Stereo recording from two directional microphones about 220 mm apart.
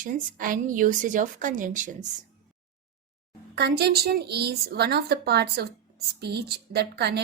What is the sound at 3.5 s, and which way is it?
A woman's voice, 45° right (ahead or behind).